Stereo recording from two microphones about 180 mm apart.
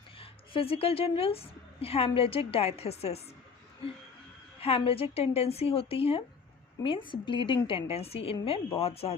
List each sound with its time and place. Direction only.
0.2 s a woman's voice: 30° left (ahead or behind)
4.6 s a woman's voice: 30° left (ahead or behind)